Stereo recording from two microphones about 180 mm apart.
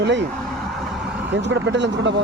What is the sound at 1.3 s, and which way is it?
Speech, 80° right.